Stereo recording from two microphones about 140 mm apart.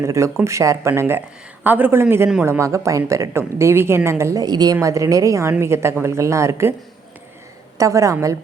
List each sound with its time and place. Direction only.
0.0 s a woman's voice: 20° right (ahead or behind)
7.8 s a woman's voice: 20° right (ahead or behind)